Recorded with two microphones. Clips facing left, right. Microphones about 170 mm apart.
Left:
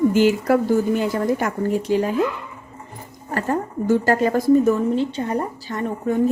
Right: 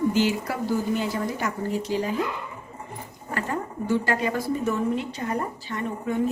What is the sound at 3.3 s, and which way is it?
Speech, 45° left (ahead or behind).